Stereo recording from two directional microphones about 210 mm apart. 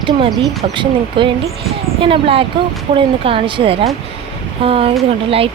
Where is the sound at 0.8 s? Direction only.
25° right (ahead or behind).